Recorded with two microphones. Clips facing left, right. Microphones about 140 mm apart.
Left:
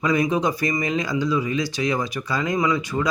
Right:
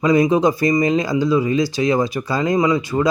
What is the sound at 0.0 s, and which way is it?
Speech, 25° right (ahead or behind).